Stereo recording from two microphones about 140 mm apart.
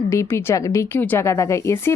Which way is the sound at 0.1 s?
20° left (ahead or behind).